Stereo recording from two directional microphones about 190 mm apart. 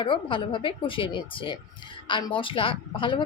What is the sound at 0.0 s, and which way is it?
Speech, 25° left (ahead or behind).